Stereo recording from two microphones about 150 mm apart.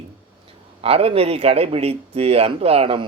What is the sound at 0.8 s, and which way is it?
Speech, 40° right (ahead or behind).